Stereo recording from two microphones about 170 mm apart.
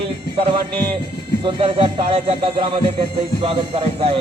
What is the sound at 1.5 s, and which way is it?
Speech, 30° right (ahead or behind).